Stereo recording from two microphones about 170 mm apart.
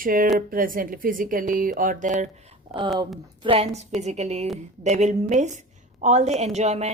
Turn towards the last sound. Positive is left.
turn(degrees=-40)  # may be behind; listen again after turning